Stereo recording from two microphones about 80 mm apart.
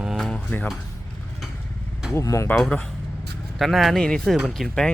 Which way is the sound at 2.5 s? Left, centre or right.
Centre.